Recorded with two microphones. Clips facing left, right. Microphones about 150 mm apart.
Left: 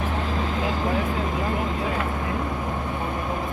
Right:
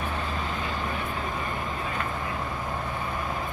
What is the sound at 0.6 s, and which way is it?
Vehicle, 90° left.